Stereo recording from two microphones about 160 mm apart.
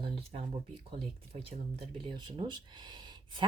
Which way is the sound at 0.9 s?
35° right (ahead or behind).